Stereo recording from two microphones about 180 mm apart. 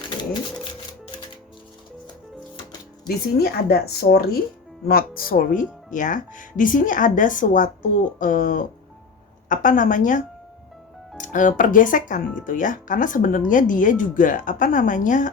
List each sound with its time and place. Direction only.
3.3 s speech: 60° left (ahead or behind)